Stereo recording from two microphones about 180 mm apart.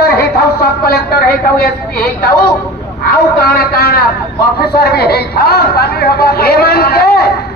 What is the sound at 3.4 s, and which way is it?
A woman's voice, 60° left (ahead or behind).